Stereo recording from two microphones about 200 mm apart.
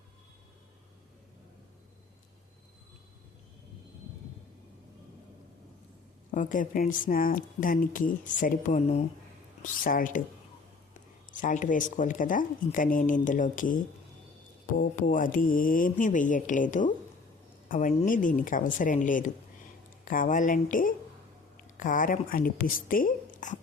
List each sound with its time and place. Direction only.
6.3 s speech: 40° left (ahead or behind)